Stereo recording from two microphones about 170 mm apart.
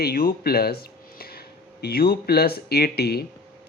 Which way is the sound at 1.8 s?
65° left (ahead or behind).